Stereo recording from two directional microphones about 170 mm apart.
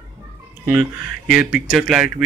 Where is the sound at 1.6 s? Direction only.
5° right (ahead or behind).